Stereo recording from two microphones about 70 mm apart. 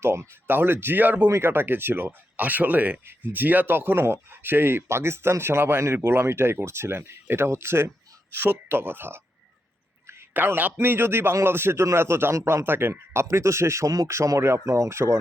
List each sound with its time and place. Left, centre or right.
0.0 s speech: right
10.3 s speech: right
12.6 s speech: right